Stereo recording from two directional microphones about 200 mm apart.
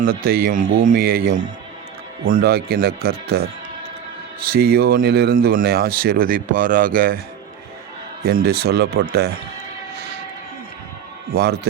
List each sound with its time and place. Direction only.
0.0 s speech: 45° right (ahead or behind)
8.2 s speech: 50° right (ahead or behind)
11.3 s speech: 55° right (ahead or behind)